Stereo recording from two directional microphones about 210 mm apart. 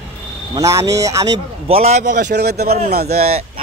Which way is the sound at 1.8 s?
30° right (ahead or behind).